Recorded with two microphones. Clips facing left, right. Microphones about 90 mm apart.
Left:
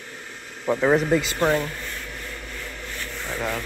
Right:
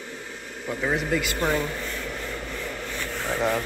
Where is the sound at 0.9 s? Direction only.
30° left (ahead or behind).